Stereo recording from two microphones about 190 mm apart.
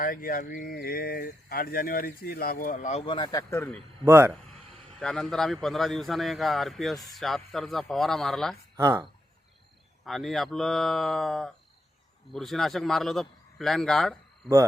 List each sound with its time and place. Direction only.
0.0 s speech: 45° left (ahead or behind)
3.1 s speech: 25° left (ahead or behind)
3.5 s a man's voice: 10° left (ahead or behind)
4.0 s speech: 10° right (ahead or behind)
4.9 s a man's voice: 5° left (ahead or behind)
8.7 s speech: 20° right (ahead or behind)
10.0 s a man's voice: centre (ahead or behind)